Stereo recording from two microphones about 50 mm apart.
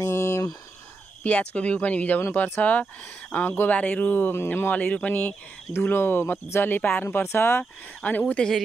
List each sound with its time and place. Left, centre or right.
0.0 s a sound: left
1.2 s speech: left
8.0 s speech: left